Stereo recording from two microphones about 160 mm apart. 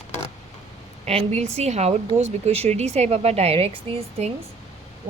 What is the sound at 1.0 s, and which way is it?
A woman's voice, 40° right (ahead or behind).